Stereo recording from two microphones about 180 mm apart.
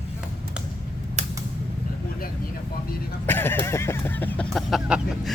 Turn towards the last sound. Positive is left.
turn(degrees=0)  # may be behind; listen again after turning